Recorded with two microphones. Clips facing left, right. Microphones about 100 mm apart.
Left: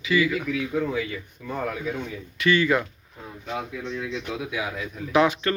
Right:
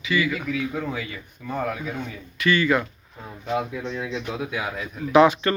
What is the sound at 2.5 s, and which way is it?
Speech, 5° left (ahead or behind).